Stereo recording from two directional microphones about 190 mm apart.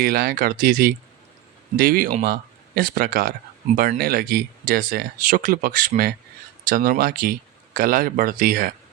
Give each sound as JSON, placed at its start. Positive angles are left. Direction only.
{"t": 0.0, "sound": "speech", "side_deg": -55}